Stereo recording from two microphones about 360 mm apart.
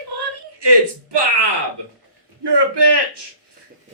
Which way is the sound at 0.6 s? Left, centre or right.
Right.